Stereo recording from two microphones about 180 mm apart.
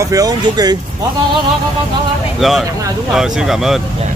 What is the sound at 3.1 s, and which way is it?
Speech, centre (ahead or behind).